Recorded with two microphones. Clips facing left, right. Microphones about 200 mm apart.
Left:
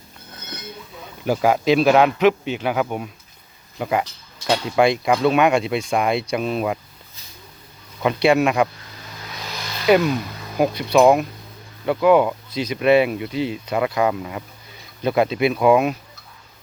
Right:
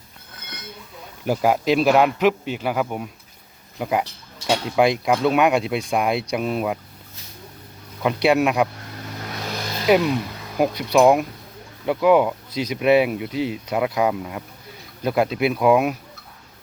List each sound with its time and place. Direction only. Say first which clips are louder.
1.3 s a man's voice: left 2 dB; centre (ahead or behind)
8.0 s a man's voice: left 1 dB; 5° right (ahead or behind)
8.7 s vehicle: right 6 dB; 60° right (ahead or behind)
9.8 s speech: left 1 dB; centre (ahead or behind)
10.6 s a man's voice: left 1 dB; 15° right (ahead or behind)